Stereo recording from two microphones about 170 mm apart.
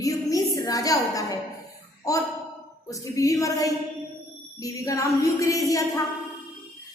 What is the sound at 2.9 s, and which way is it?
A woman's voice, 20° left (ahead or behind).